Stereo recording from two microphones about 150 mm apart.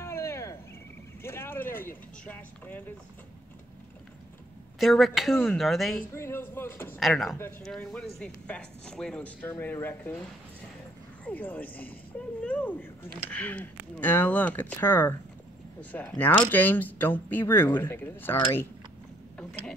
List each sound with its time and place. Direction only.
0.0 s cricket: 15° left (ahead or behind)
1.2 s vehicle: 15° left (ahead or behind)
4.7 s speech: centre (ahead or behind)
6.1 s speech: 15° left (ahead or behind)
7.0 s speech: centre (ahead or behind)
11.2 s speech: 10° left (ahead or behind)